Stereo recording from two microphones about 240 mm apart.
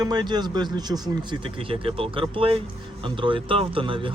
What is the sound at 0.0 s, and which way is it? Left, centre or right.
Speech, centre.